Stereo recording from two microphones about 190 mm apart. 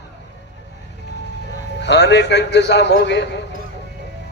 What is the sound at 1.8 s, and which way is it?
A man's voice, 65° left (ahead or behind).